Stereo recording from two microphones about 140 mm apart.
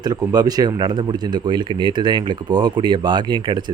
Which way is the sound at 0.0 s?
30° right (ahead or behind).